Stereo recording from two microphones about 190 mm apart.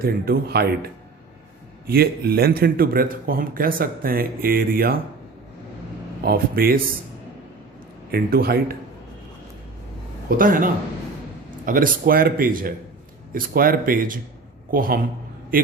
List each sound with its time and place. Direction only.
0.0 s speech: 55° right (ahead or behind)
1.9 s speech: 55° right (ahead or behind)
6.2 s speech: 50° right (ahead or behind)
8.1 s speech: 55° right (ahead or behind)
10.2 s a man's voice: 45° right (ahead or behind)